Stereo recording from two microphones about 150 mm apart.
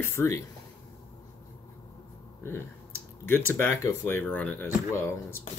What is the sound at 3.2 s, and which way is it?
Speech, 15° left (ahead or behind).